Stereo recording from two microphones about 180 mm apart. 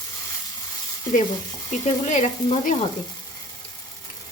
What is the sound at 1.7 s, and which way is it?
Frying, 40° left (ahead or behind).